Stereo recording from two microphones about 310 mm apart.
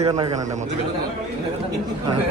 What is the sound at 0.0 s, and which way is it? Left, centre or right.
Speech, centre.